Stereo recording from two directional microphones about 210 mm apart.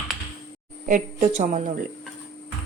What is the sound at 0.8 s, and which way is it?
Speech, 35° right (ahead or behind).